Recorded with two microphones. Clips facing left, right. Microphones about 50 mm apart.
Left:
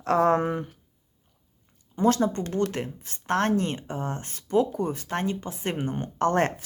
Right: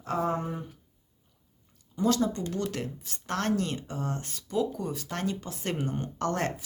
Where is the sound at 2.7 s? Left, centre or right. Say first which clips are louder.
Left 2 dB; left.